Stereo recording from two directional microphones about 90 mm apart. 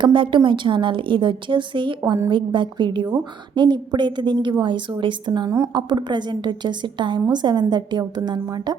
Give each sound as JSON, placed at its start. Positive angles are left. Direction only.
{"t": 0.0, "sound": "a woman's voice", "side_deg": -65}